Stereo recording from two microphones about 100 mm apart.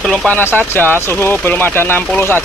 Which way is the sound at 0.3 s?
20° left (ahead or behind).